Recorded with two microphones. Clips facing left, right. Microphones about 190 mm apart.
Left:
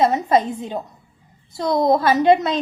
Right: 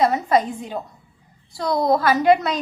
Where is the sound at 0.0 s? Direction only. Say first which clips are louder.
Left 1 dB; 25° left (ahead or behind).